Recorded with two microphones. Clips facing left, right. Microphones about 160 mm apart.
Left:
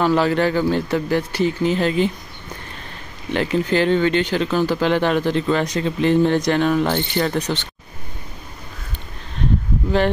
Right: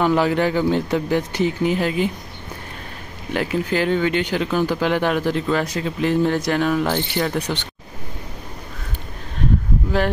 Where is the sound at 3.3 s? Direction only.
5° right (ahead or behind).